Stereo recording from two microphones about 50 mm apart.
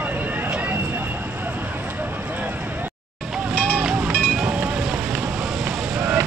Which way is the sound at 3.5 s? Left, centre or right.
Right.